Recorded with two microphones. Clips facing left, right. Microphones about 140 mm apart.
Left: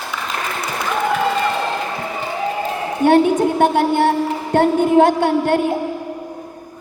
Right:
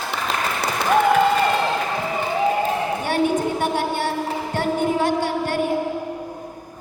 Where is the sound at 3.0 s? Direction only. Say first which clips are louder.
Left 10 dB; 55° left (ahead or behind).